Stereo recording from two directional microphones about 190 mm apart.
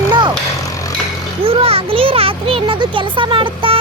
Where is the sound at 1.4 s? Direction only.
30° right (ahead or behind).